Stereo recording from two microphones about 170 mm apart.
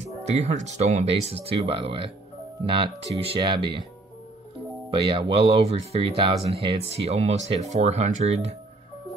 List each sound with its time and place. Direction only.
0.2 s speech: 40° right (ahead or behind)
4.9 s speech: 30° right (ahead or behind)